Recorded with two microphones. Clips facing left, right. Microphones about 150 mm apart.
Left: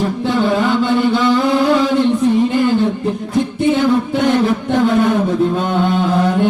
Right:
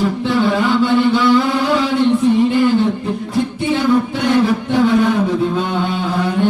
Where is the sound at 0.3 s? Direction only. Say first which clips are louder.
Left 1 dB; 45° left (ahead or behind).